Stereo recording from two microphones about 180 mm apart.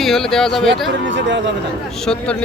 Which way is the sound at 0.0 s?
Centre (ahead or behind).